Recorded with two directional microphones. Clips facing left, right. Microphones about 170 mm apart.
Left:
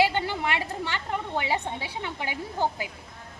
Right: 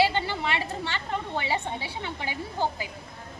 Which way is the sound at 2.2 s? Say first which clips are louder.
Left 1 dB; 15° left (ahead or behind).